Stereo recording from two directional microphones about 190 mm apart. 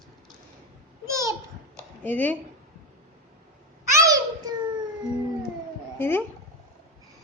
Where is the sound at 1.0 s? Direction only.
15° right (ahead or behind).